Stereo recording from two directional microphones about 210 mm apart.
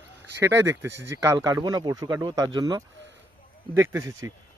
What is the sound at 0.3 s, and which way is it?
Speech, 15° right (ahead or behind).